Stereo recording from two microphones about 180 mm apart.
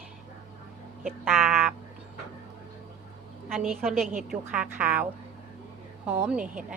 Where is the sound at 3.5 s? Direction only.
Centre (ahead or behind).